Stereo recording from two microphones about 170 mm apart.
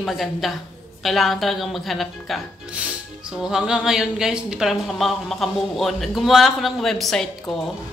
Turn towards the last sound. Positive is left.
turn(degrees=0)  # may be behind; listen again after turning